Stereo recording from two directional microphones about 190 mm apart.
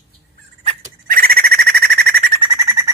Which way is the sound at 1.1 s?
50° right (ahead or behind).